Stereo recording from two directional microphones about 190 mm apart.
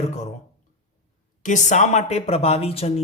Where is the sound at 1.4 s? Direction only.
40° left (ahead or behind).